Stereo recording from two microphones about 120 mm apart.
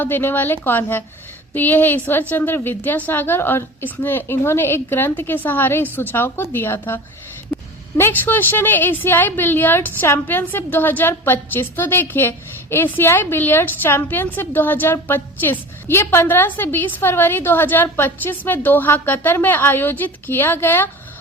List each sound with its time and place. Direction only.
0.0 s a woman's voice: 15° left (ahead or behind)
7.5 s a sound: 5° right (ahead or behind)
7.9 s a woman's voice: 20° left (ahead or behind)